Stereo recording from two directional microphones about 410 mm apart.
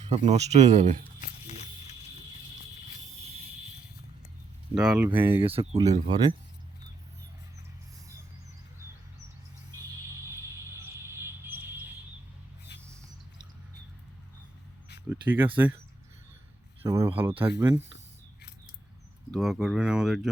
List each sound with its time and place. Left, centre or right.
0.1 s speech: centre
4.7 s speech: centre
10.8 s music: centre
15.1 s speech: centre
16.8 s speech: centre
19.3 s speech: centre